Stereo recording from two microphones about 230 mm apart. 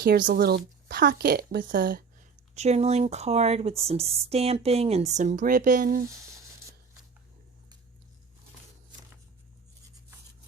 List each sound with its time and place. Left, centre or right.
0.0 s speech: right
2.6 s speech: right